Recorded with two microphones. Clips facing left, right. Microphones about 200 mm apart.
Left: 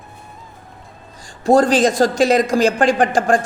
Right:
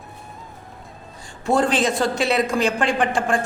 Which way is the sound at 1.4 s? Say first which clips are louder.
Left 6 dB; 40° left (ahead or behind).